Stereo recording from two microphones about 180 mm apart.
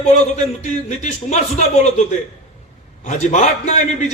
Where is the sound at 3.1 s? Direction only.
40° left (ahead or behind).